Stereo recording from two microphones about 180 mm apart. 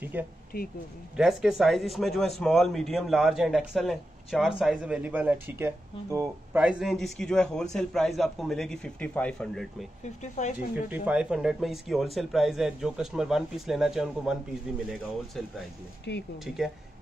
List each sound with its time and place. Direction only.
0.1 s speech: 10° right (ahead or behind)
0.5 s speech: 55° left (ahead or behind)
1.1 s a man's voice: centre (ahead or behind)
6.6 s a man's voice: 5° right (ahead or behind)
10.2 s speech: 40° left (ahead or behind)
10.9 s a man's voice: 5° right (ahead or behind)
16.1 s speech: 70° left (ahead or behind)
16.4 s a man's voice: 5° right (ahead or behind)